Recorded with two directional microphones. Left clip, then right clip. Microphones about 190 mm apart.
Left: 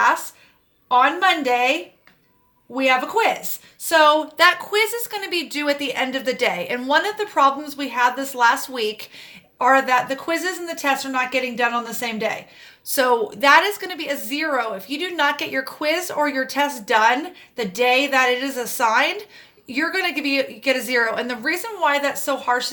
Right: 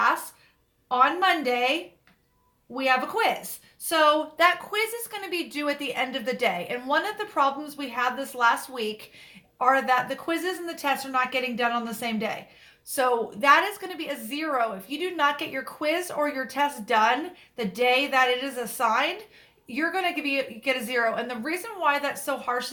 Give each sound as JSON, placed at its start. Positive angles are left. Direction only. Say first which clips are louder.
{"t": 0.9, "sound": "a woman's voice", "louder": "left 5 dB", "side_deg": 35}
{"t": 2.9, "sound": "a woman's voice", "louder": "left 4 dB", "side_deg": 35}